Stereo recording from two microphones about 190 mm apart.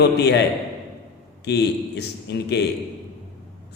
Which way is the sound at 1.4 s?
60° left (ahead or behind).